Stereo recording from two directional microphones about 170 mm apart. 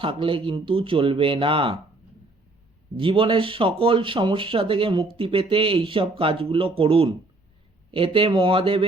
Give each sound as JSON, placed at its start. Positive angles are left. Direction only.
{"t": 0.0, "sound": "speech", "side_deg": -30}
{"t": 3.0, "sound": "speech", "side_deg": -30}